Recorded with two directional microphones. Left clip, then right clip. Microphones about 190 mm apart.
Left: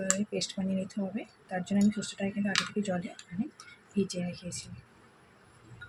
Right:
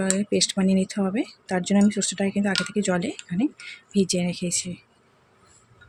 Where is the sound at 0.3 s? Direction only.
55° right (ahead or behind).